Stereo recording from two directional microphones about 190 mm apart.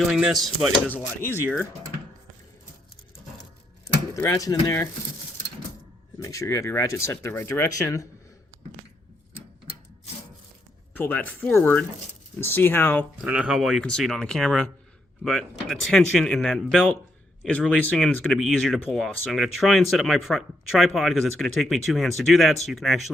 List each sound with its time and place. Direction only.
0.1 s speech: 5° right (ahead or behind)
3.8 s speech: 15° left (ahead or behind)
6.1 s speech: 15° left (ahead or behind)
10.9 s speech: 10° left (ahead or behind)
13.2 s speech: 5° right (ahead or behind)